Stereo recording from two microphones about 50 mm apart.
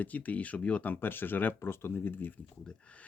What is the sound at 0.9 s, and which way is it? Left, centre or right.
Speech, left.